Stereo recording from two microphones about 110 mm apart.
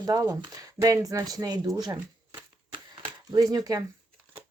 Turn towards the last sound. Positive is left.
turn(degrees=-35)  # may be behind; listen again after turning